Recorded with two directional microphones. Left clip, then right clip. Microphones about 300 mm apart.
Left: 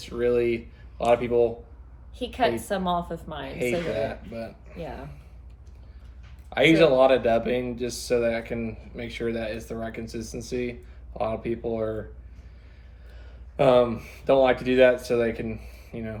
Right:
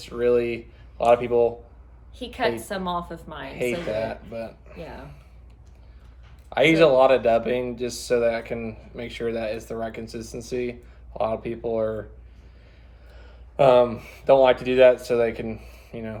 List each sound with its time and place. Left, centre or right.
0.0 s speech: centre
2.1 s a woman's voice: centre
3.5 s speech: centre
6.5 s speech: centre
13.1 s speech: centre